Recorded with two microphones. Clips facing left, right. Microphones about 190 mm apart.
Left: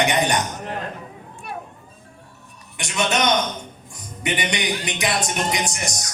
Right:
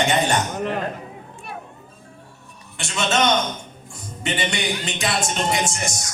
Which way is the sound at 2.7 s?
15° left (ahead or behind).